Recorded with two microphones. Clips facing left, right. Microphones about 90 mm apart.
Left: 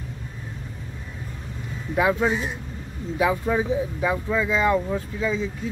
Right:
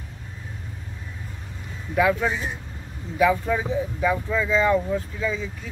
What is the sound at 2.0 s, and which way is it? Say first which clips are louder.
Speech: even; 25° left (ahead or behind).